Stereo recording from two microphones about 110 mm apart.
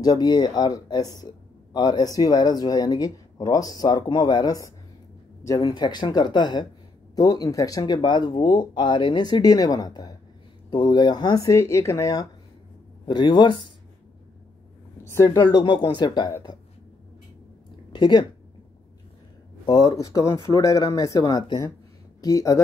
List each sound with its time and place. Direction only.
0.0 s speech: 40° left (ahead or behind)
13.0 s speech: 45° left (ahead or behind)
15.0 s speech: 25° left (ahead or behind); by 16.3 s 45° left (ahead or behind)
17.9 s speech: 45° left (ahead or behind)
19.6 s speech: 35° left (ahead or behind)
21.2 s speech: 45° left (ahead or behind)